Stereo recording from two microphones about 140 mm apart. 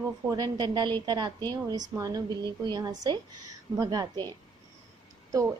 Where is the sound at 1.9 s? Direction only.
25° right (ahead or behind).